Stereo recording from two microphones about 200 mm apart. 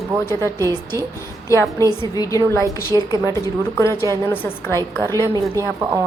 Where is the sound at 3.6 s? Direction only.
10° left (ahead or behind).